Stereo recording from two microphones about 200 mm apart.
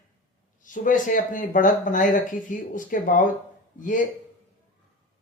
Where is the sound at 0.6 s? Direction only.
40° left (ahead or behind).